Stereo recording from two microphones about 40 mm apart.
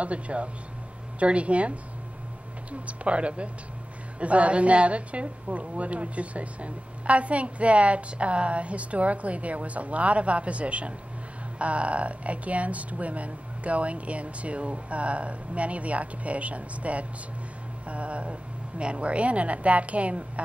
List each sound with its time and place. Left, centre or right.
0.0 s a woman's voice: right